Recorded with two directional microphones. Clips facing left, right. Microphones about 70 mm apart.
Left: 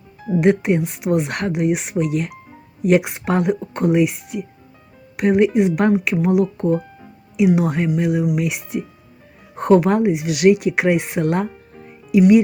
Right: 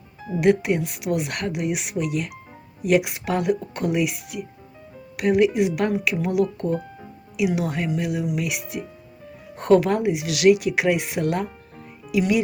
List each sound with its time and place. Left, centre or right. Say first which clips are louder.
1.0 s speech: left 5 dB; left